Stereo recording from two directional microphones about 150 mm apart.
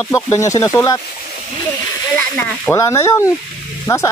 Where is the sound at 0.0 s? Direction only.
20° left (ahead or behind).